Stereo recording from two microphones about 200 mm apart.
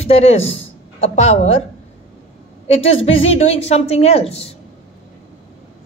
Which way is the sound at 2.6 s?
30° left (ahead or behind).